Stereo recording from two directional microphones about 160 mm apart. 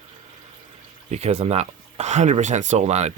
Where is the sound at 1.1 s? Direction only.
45° right (ahead or behind).